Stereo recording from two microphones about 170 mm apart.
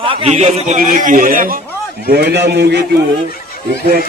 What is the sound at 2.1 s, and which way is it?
Speech, 75° right (ahead or behind).